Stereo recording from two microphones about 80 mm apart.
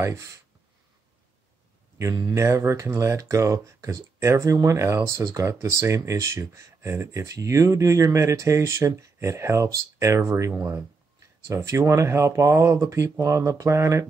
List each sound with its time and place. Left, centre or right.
0.0 s speech: right
2.0 s speech: right